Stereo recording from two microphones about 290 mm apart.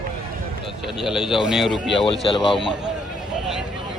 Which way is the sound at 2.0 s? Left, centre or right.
Centre.